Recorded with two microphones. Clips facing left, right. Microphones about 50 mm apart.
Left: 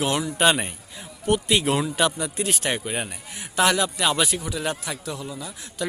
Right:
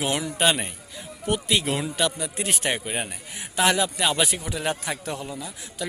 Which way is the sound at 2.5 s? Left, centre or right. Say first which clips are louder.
Right 2 dB; centre.